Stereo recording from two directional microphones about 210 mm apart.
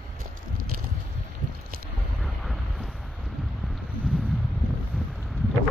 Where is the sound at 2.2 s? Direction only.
Centre (ahead or behind).